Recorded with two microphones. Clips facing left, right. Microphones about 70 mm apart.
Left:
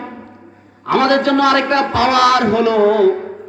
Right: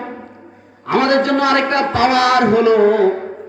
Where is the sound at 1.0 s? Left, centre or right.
Right.